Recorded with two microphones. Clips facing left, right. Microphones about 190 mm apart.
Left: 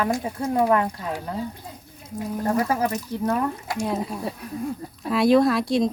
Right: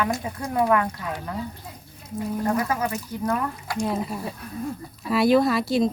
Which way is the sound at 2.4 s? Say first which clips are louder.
Left 3 dB; 30° left (ahead or behind).